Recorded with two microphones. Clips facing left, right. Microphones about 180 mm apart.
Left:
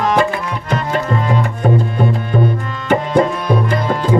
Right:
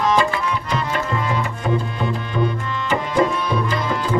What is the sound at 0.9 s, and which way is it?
Music, 40° left (ahead or behind).